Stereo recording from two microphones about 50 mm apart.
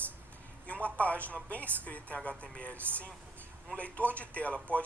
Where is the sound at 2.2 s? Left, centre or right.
Centre.